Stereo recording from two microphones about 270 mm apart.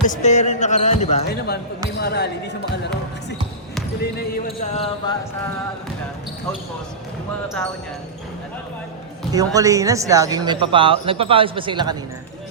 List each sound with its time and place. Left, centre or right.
0.0 s speech: left
1.3 s speech: left
4.2 s speech: left
9.3 s a man's voice: centre